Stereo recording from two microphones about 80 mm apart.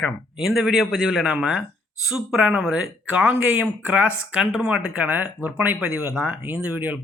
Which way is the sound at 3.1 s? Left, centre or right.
Centre.